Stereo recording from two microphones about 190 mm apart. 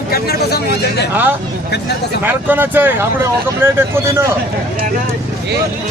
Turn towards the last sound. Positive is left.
turn(degrees=-15)  # may be behind; listen again after turning